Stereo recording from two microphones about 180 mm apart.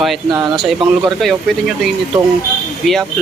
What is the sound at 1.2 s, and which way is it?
Speech, centre (ahead or behind).